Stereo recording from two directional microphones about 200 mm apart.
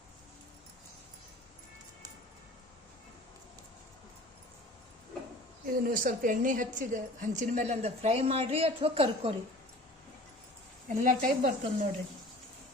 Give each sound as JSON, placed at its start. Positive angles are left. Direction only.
{"t": 5.9, "sound": "a woman's voice", "side_deg": -40}
{"t": 10.8, "sound": "a woman's voice", "side_deg": -40}